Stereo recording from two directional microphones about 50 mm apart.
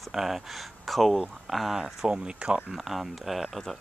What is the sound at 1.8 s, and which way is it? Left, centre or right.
Speech, centre.